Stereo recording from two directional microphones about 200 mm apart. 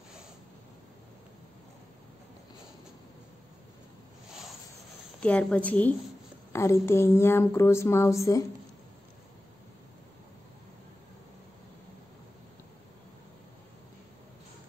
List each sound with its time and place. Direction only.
5.2 s speech: 5° left (ahead or behind)